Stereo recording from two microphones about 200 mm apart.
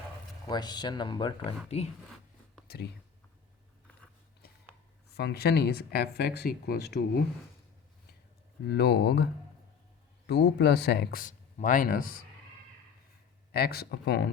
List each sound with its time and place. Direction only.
0.4 s speech: 20° left (ahead or behind)
2.6 s speech: 50° left (ahead or behind)
5.1 s speech: 55° left (ahead or behind)
8.6 s speech: 55° left (ahead or behind)
10.2 s speech: 55° left (ahead or behind)
13.5 s speech: 50° left (ahead or behind)